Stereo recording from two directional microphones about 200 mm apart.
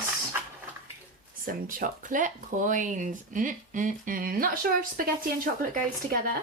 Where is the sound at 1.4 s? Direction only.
45° right (ahead or behind).